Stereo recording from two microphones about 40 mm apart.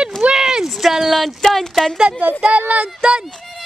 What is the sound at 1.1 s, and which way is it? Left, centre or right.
Speech, centre.